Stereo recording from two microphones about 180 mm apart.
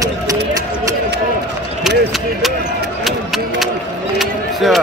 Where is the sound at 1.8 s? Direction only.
Centre (ahead or behind).